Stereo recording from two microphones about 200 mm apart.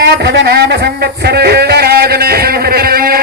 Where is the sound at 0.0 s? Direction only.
55° right (ahead or behind).